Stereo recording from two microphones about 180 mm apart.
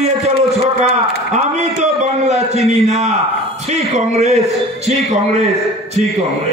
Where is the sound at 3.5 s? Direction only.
40° right (ahead or behind).